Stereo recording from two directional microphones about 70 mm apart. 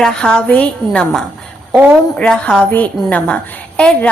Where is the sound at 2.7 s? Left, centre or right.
Left.